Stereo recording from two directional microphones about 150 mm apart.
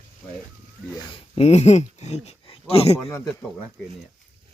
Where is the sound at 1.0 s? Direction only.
40° left (ahead or behind).